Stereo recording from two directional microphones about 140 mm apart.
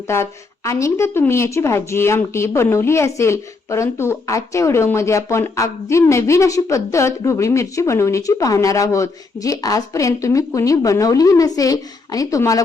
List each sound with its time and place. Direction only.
0.1 s a woman's voice: 20° left (ahead or behind)